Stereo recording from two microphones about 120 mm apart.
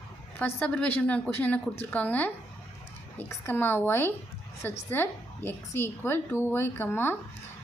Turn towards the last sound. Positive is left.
turn(degrees=20)  # may be behind; listen again after turning